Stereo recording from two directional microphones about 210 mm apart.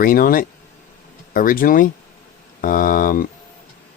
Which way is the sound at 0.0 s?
45° left (ahead or behind).